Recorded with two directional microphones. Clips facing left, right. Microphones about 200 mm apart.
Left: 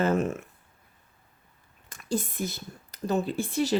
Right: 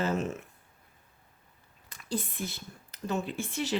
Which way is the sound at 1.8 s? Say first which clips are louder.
Left 4 dB; 45° left (ahead or behind).